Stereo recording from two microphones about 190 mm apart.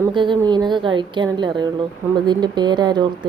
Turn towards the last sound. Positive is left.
turn(degrees=-20)  # may be behind; listen again after turning